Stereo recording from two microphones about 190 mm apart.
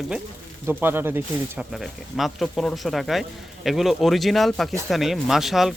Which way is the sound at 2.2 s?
Centre (ahead or behind).